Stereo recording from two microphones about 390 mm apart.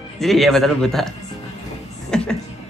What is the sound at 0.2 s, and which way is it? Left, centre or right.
Speech, centre.